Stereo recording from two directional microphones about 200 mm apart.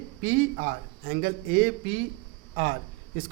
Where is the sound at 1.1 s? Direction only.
50° right (ahead or behind).